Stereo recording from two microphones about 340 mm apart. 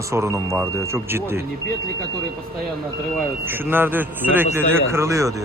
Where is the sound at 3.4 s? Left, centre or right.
Centre.